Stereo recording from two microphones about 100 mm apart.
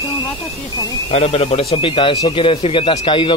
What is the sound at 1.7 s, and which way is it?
Speech, 60° left (ahead or behind).